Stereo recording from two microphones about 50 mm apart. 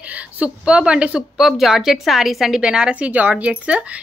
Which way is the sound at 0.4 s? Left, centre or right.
Right.